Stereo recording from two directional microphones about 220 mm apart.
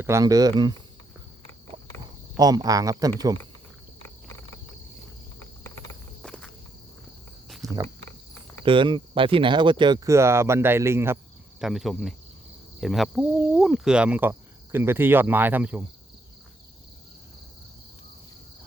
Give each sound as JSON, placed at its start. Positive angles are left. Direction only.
{"t": 0.0, "sound": "speech", "side_deg": -15}
{"t": 2.4, "sound": "speech", "side_deg": -15}
{"t": 6.2, "sound": "insect", "side_deg": 5}
{"t": 7.6, "sound": "cricket", "side_deg": -15}
{"t": 8.6, "sound": "speech", "side_deg": -20}
{"t": 11.6, "sound": "speech", "side_deg": 0}